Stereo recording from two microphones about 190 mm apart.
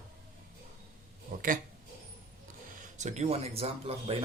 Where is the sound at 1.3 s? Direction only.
45° right (ahead or behind).